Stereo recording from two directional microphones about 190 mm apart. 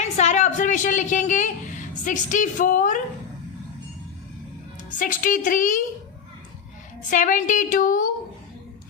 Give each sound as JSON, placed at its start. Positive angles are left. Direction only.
{"t": 0.0, "sound": "a woman's voice", "side_deg": 35}
{"t": 4.9, "sound": "a woman's voice", "side_deg": 45}
{"t": 7.1, "sound": "a woman's voice", "side_deg": 40}